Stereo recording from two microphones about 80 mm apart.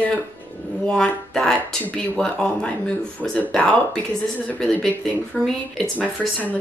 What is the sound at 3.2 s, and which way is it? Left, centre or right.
A woman's voice, centre.